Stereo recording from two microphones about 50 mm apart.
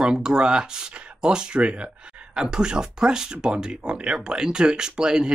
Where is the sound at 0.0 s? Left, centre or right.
Centre.